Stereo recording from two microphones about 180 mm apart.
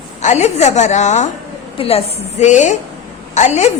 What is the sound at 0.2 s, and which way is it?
A woman's voice, 40° left (ahead or behind).